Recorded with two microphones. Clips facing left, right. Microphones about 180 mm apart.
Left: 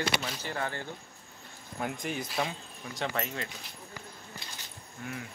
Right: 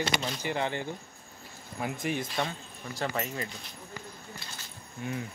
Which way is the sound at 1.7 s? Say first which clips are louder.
Right 2 dB; centre (ahead or behind).